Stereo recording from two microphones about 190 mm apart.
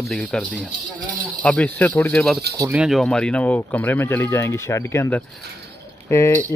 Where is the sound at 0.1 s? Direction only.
5° left (ahead or behind).